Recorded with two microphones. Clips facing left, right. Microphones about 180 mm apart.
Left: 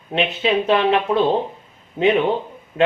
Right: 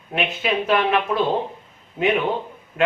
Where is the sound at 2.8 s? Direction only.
25° left (ahead or behind).